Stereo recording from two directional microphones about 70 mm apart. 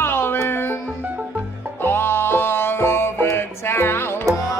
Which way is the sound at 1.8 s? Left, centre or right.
Left.